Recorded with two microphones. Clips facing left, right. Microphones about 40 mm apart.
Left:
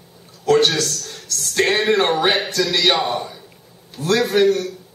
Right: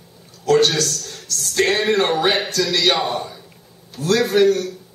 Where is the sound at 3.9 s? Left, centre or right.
Left.